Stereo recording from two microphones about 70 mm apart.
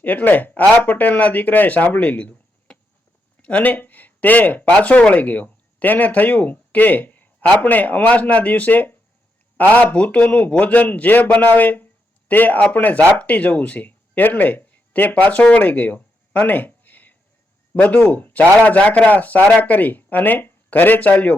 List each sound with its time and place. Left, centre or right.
0.0 s a man's voice: left